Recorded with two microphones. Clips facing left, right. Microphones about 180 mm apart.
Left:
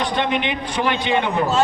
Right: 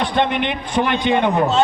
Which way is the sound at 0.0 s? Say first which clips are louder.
Right 2 dB; 55° right (ahead or behind).